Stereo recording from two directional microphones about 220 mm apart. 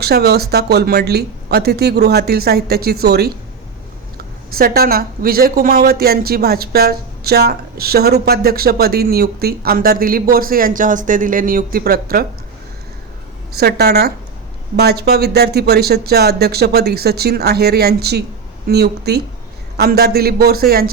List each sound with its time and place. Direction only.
0.0 s speech: 45° right (ahead or behind)
4.5 s speech: 45° right (ahead or behind)
13.6 s speech: 45° right (ahead or behind)